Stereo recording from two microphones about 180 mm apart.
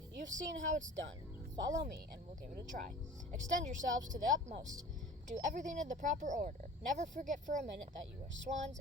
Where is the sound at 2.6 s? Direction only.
50° right (ahead or behind).